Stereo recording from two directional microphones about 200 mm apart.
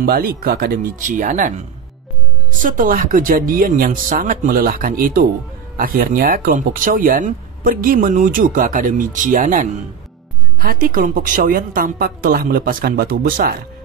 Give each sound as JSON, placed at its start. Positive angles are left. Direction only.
{"t": 0.0, "sound": "speech", "side_deg": -50}
{"t": 2.5, "sound": "speech", "side_deg": -40}